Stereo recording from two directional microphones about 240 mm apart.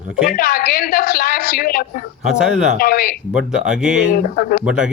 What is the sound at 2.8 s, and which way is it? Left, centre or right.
Speech, left.